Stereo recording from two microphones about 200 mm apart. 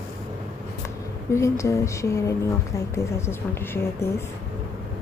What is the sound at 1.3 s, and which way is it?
A woman's voice, 15° left (ahead or behind).